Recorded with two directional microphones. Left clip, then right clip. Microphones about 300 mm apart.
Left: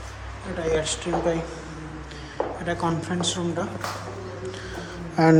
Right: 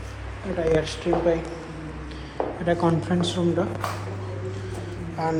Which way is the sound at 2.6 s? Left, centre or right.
Centre.